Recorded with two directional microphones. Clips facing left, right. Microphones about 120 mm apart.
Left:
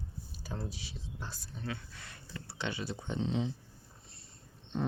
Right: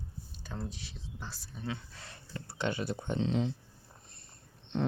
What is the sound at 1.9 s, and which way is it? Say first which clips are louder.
Speech: right 2 dB; 30° right (ahead or behind).